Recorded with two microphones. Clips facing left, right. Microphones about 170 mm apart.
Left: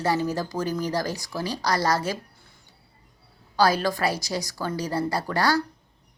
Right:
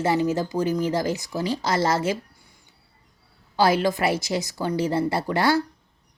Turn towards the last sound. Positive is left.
turn(degrees=-25)  # may be behind; listen again after turning